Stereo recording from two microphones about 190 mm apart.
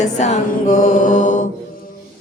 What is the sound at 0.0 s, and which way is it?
Music, 40° left (ahead or behind).